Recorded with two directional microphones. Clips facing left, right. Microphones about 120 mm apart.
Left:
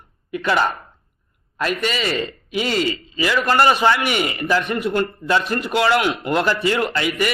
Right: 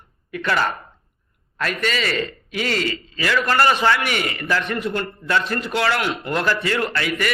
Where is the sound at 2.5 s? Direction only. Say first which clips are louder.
Left 4 dB; 15° left (ahead or behind).